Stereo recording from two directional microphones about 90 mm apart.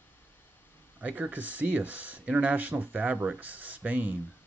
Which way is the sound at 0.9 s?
15° right (ahead or behind).